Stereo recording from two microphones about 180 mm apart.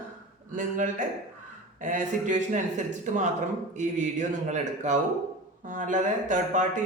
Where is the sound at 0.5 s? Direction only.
45° right (ahead or behind).